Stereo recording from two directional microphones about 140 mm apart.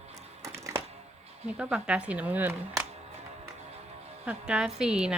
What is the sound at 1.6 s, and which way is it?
Speech, 5° right (ahead or behind).